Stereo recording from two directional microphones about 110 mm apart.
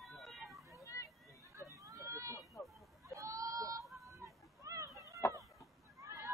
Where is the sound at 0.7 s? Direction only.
30° left (ahead or behind).